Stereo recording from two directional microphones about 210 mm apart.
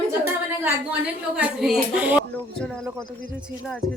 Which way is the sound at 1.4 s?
5° right (ahead or behind).